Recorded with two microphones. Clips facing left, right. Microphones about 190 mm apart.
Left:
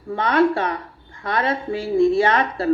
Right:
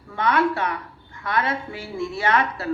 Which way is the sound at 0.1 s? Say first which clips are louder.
Left 4 dB; 30° left (ahead or behind).